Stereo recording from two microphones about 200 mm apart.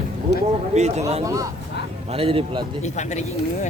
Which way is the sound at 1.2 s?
15° right (ahead or behind).